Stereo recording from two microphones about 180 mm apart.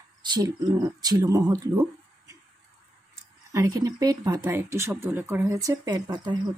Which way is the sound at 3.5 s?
20° right (ahead or behind).